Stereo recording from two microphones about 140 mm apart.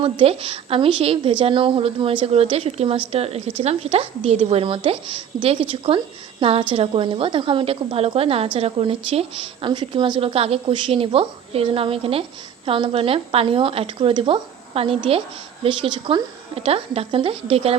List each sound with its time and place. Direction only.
0.0 s a woman's voice: 40° right (ahead or behind)